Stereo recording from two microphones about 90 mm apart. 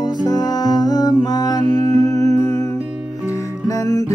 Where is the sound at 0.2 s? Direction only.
45° left (ahead or behind).